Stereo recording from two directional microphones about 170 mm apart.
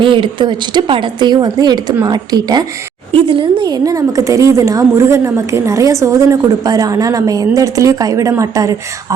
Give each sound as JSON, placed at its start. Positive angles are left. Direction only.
{"t": 0.0, "sound": "speech", "side_deg": -30}